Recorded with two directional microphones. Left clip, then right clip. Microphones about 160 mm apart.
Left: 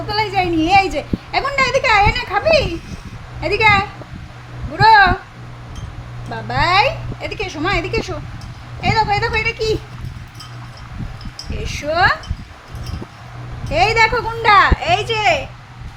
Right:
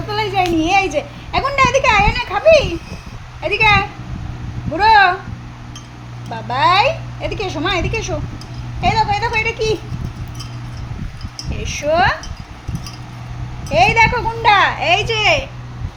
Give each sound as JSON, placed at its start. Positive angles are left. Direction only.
{"t": 0.2, "sound": "a sound", "side_deg": 20}
{"t": 3.4, "sound": "a woman's voice", "side_deg": 20}
{"t": 6.3, "sound": "a woman's voice", "side_deg": 25}
{"t": 11.6, "sound": "a woman's voice", "side_deg": 20}
{"t": 13.7, "sound": "a woman's voice", "side_deg": 25}